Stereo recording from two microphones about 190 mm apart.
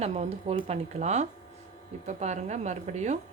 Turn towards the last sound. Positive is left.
turn(degrees=-40)  # may be behind; listen again after turning